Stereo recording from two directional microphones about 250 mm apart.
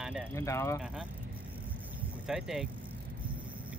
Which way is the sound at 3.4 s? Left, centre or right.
Centre.